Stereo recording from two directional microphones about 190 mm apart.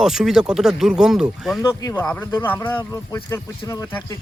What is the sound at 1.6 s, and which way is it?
Speech, 15° left (ahead or behind).